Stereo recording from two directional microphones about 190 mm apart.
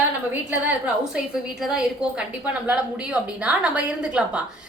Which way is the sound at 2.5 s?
5° right (ahead or behind).